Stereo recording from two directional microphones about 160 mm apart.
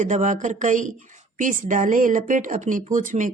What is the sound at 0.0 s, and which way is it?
Speech, 50° right (ahead or behind).